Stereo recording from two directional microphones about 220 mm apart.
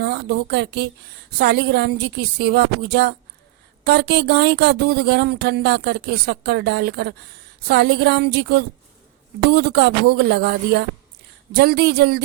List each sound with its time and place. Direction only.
0.0 s speech: 50° right (ahead or behind)